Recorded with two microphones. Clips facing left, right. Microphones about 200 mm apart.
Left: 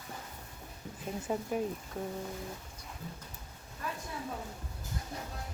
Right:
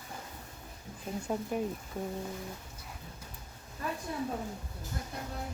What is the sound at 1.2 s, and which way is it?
Speech, centre (ahead or behind).